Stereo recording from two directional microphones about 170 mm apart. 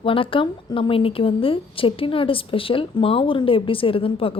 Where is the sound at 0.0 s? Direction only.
30° left (ahead or behind).